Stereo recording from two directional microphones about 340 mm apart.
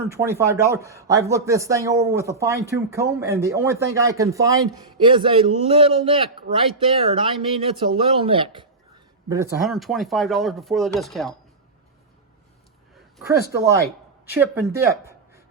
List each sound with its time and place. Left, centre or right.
0.1 s speech: centre
9.3 s speech: centre
14.3 s speech: centre